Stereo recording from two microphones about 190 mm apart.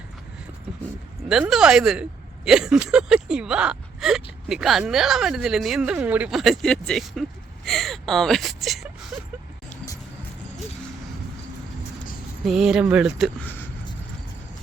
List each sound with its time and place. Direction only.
1.3 s speech: centre (ahead or behind)
12.5 s speech: centre (ahead or behind)